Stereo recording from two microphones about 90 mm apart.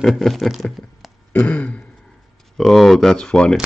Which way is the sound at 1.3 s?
20° left (ahead or behind).